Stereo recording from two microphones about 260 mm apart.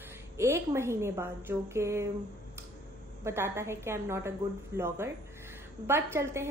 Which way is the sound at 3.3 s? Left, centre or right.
Centre.